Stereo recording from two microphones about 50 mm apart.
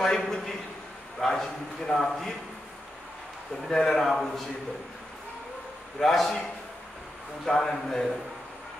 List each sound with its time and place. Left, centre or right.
0.0 s a man's voice: centre
3.6 s a man's voice: centre
5.9 s a man's voice: centre